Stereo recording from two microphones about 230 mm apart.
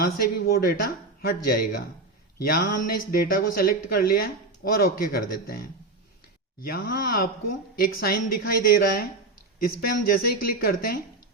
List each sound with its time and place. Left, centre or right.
0.0 s speech: left
2.6 s speech: left
2.9 s speech: left
6.6 s speech: left